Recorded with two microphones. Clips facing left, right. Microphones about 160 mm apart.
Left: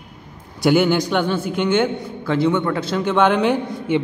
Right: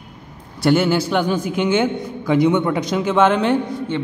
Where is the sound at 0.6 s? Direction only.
Centre (ahead or behind).